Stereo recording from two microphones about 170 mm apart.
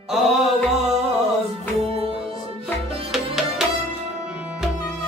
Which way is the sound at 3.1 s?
Centre (ahead or behind).